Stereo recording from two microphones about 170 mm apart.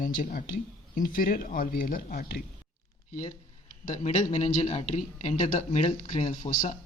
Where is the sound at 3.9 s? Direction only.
40° left (ahead or behind).